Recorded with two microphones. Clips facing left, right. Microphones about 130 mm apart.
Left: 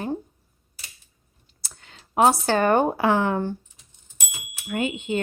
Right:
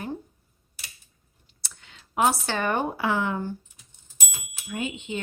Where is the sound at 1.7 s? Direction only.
40° left (ahead or behind); by 3.6 s 65° left (ahead or behind).